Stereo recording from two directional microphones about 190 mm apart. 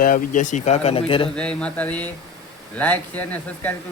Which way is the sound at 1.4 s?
5° left (ahead or behind).